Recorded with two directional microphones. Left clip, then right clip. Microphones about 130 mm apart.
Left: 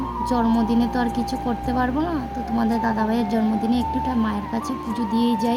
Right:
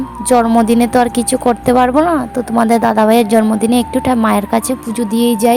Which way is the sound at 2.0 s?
65° right (ahead or behind).